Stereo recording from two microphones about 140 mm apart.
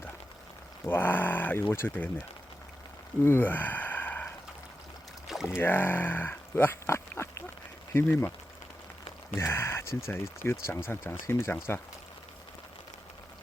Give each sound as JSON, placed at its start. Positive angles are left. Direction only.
{"t": 0.9, "sound": "speech", "side_deg": 15}
{"t": 3.2, "sound": "a sound", "side_deg": 15}
{"t": 5.5, "sound": "speech", "side_deg": 15}
{"t": 9.3, "sound": "speech", "side_deg": 15}